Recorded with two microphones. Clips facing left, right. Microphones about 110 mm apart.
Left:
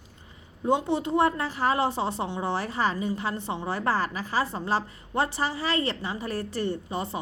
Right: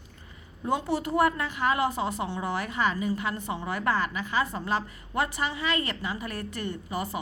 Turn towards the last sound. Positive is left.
turn(degrees=25)  # may be behind; listen again after turning